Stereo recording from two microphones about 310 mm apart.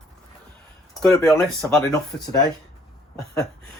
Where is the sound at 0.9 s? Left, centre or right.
Centre.